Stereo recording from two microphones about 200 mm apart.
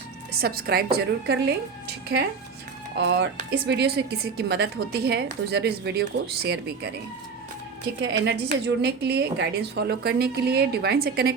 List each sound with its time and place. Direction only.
0.3 s a woman's voice: 50° right (ahead or behind)
3.0 s a woman's voice: 60° right (ahead or behind)
8.0 s a woman's voice: 60° right (ahead or behind)